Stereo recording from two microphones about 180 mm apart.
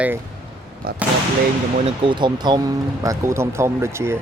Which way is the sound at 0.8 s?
60° right (ahead or behind).